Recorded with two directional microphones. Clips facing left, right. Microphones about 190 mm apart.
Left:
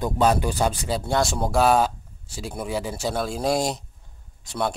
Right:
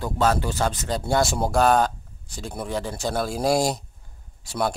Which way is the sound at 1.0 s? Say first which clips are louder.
Right 2 dB; 5° right (ahead or behind).